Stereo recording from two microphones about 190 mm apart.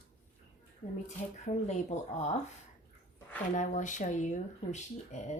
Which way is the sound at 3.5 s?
40° left (ahead or behind).